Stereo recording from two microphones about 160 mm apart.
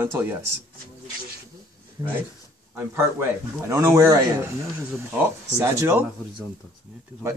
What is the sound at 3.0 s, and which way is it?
A man's voice, 15° right (ahead or behind).